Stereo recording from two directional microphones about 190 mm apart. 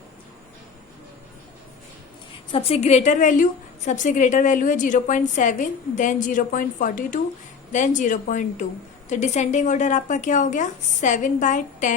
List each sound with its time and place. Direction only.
2.5 s a woman's voice: 30° left (ahead or behind)